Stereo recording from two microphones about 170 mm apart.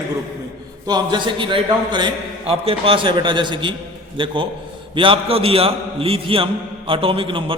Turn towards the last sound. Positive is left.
turn(degrees=-30)  # may be behind; listen again after turning